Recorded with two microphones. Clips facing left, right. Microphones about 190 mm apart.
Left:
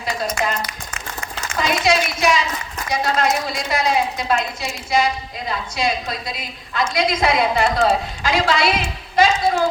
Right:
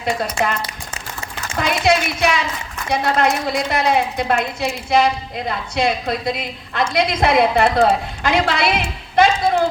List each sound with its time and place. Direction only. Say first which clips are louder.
0.4 s a woman's voice: right 2 dB; 25° right (ahead or behind)
1.5 s a woman's voice: right 1 dB; 55° right (ahead or behind)